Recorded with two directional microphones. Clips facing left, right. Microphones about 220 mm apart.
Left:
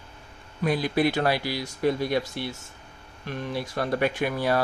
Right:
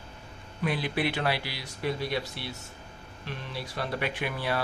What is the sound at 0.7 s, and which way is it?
Speech, 40° left (ahead or behind).